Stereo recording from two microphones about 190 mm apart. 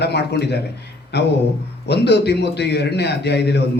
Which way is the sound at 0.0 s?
60° left (ahead or behind).